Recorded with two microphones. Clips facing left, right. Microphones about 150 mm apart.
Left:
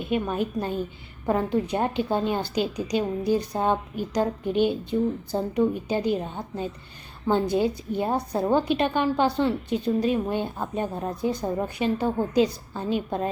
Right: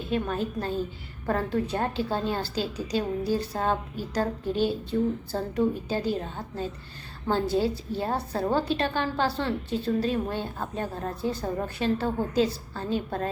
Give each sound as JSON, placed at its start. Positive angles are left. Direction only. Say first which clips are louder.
{"t": 0.1, "sound": "a woman's voice", "louder": "left 2 dB", "side_deg": 15}